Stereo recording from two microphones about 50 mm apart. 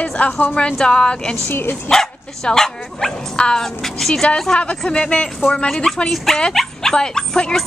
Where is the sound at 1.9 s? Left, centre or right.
Centre.